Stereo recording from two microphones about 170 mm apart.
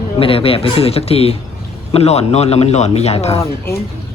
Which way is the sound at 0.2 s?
35° left (ahead or behind).